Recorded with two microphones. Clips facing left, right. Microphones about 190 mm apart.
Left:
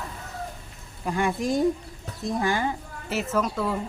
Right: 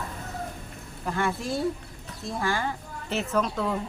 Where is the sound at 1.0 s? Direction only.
15° left (ahead or behind).